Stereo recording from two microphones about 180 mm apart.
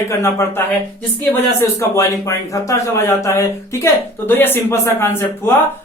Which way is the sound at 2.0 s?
20° left (ahead or behind).